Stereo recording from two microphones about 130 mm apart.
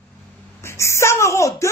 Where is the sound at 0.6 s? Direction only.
20° left (ahead or behind).